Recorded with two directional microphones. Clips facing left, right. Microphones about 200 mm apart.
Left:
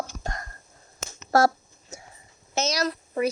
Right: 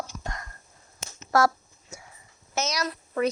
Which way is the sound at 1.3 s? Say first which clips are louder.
Left 2 dB; 30° left (ahead or behind).